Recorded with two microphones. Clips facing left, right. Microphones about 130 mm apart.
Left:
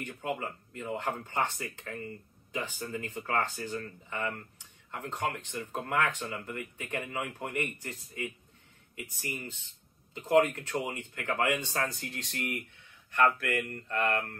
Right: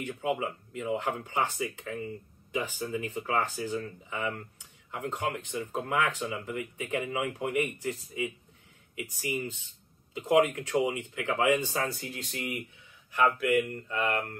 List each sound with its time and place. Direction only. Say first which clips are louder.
0.0 s speech: right 4 dB; 10° right (ahead or behind)